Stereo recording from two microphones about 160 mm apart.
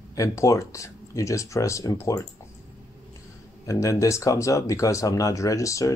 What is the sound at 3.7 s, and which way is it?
Speech, 20° left (ahead or behind).